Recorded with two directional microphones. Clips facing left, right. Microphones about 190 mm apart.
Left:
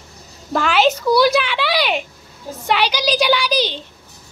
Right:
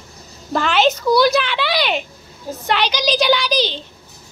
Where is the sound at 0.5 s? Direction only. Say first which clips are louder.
Even; 5° left (ahead or behind).